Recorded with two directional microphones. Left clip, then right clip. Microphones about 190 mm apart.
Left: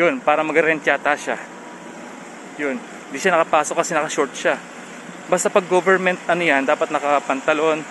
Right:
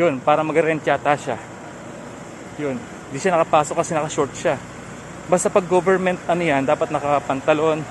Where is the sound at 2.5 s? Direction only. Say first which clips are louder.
Left 2 dB; 5° right (ahead or behind).